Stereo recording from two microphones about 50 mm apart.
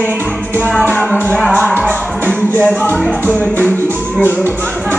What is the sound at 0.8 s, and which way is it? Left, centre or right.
Music, left.